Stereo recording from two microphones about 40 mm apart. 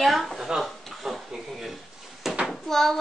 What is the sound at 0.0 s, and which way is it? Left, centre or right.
Speech, centre.